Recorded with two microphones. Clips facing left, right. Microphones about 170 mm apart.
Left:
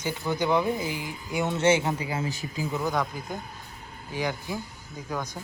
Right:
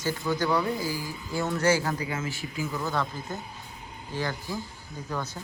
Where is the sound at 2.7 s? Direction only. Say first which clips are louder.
Left 3 dB; 15° left (ahead or behind).